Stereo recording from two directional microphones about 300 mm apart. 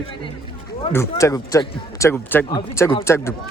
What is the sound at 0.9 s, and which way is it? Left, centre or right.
A man's voice, centre.